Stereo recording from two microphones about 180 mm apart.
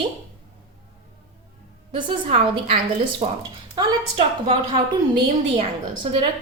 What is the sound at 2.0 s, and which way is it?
A woman's voice, 30° right (ahead or behind).